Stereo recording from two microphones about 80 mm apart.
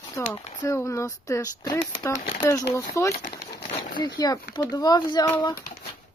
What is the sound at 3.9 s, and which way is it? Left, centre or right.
Speech, left.